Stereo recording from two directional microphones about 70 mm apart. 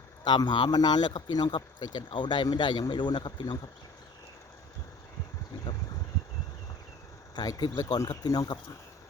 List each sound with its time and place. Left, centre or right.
0.3 s a man's voice: left
7.3 s speech: left